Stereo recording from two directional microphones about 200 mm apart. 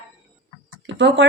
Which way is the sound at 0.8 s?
65° right (ahead or behind).